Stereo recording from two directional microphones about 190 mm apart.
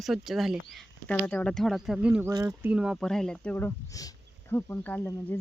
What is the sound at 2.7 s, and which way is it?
Speech, 5° right (ahead or behind).